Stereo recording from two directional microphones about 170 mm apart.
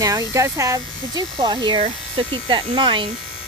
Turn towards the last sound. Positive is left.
turn(degrees=-30)  # may be behind; listen again after turning